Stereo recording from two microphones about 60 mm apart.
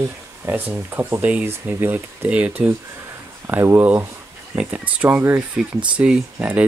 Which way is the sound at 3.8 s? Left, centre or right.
Right.